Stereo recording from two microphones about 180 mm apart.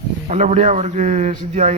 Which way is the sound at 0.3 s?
40° right (ahead or behind).